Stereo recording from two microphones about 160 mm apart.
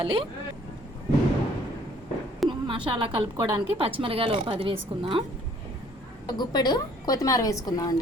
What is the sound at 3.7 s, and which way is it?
A woman's voice, 35° right (ahead or behind).